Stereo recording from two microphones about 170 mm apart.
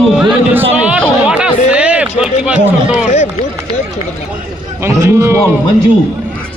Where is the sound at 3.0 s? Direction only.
40° left (ahead or behind).